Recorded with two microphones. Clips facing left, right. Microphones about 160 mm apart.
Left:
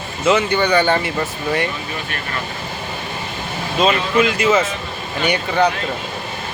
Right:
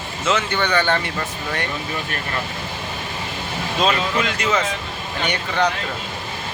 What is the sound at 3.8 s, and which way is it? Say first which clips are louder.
Speech: left 5 dB; 5° left (ahead or behind).